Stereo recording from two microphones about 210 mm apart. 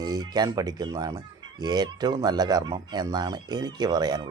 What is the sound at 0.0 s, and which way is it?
Speech, 20° right (ahead or behind).